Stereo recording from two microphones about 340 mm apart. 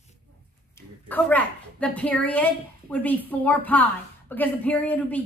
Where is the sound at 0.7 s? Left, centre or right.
Centre.